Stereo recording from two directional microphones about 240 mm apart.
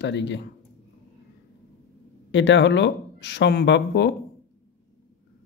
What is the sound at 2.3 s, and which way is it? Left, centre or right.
Speech, left.